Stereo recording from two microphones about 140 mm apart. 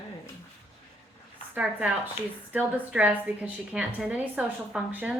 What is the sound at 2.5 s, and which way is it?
A woman's voice, 10° right (ahead or behind).